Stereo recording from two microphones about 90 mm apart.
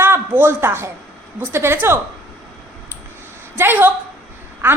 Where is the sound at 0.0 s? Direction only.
25° right (ahead or behind).